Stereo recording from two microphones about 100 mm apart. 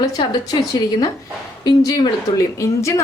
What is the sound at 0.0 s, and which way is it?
A woman's voice, 40° left (ahead or behind).